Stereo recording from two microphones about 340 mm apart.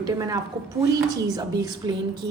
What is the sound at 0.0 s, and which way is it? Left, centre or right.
Speech, centre.